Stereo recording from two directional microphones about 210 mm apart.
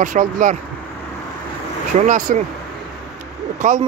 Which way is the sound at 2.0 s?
35° right (ahead or behind).